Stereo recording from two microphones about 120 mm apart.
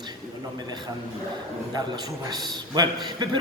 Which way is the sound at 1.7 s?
35° right (ahead or behind).